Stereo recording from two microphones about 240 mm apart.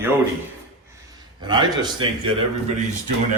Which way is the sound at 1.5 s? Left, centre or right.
Centre.